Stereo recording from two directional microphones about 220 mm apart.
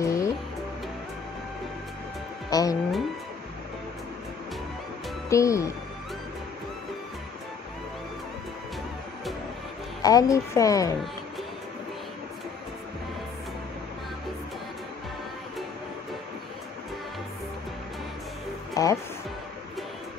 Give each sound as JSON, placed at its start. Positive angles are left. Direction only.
{"t": 0.0, "sound": "music", "side_deg": 15}
{"t": 2.5, "sound": "speech", "side_deg": 15}
{"t": 5.3, "sound": "a child's voice", "side_deg": 15}
{"t": 10.0, "sound": "a child's voice", "side_deg": 15}
{"t": 18.8, "sound": "music", "side_deg": 15}